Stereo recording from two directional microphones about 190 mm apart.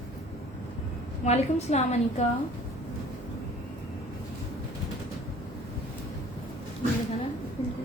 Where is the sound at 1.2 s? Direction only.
35° left (ahead or behind).